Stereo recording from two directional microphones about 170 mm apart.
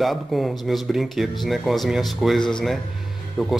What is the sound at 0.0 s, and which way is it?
Speech, centre (ahead or behind).